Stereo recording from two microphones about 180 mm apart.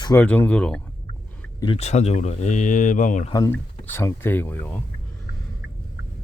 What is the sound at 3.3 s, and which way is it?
Speech, 20° left (ahead or behind).